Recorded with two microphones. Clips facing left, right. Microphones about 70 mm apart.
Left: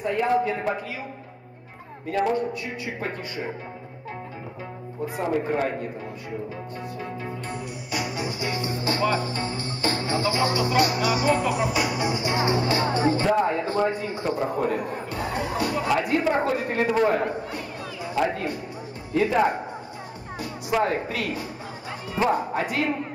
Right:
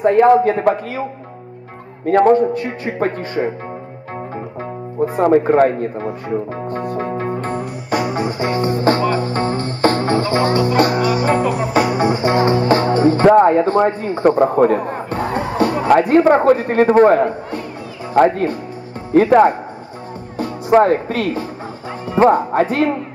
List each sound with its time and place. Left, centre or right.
0.0 s music: right
2.0 s music: right
5.2 s speech: right
9.2 s music: right
20.3 s speech: right